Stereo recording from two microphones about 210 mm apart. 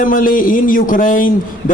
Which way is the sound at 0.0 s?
40° left (ahead or behind).